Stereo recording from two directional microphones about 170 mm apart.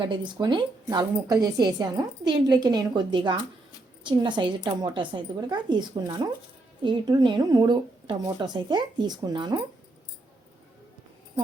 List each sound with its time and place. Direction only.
0.0 s a woman's voice: 25° right (ahead or behind)